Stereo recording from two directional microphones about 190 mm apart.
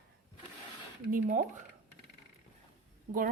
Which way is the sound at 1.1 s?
40° right (ahead or behind).